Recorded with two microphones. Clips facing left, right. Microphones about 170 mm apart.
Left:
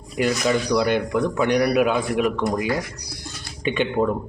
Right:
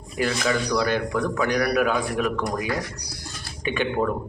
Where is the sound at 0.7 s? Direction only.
15° left (ahead or behind).